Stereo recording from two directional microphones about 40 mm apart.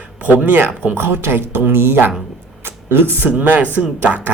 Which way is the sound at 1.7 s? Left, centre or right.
Right.